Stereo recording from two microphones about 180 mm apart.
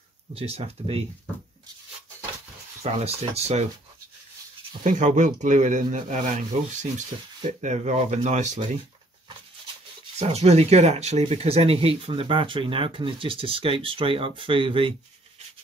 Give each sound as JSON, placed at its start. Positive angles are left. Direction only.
{"t": 0.3, "sound": "speech", "side_deg": -30}
{"t": 2.8, "sound": "speech", "side_deg": -35}
{"t": 4.8, "sound": "speech", "side_deg": -45}
{"t": 10.1, "sound": "speech", "side_deg": -35}